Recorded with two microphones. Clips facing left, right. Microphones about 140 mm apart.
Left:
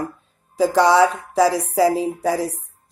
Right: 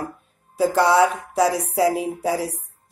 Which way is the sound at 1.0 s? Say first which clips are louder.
Left 2 dB; 30° left (ahead or behind).